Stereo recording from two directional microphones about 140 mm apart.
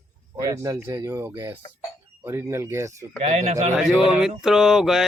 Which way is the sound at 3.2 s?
55° right (ahead or behind).